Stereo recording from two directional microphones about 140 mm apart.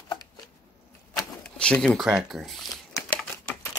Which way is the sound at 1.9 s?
5° right (ahead or behind).